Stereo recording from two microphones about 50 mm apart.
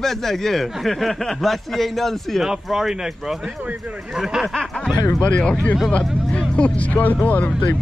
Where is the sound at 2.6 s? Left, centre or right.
Centre.